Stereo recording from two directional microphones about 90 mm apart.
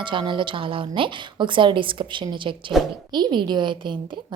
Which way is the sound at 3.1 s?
55° right (ahead or behind).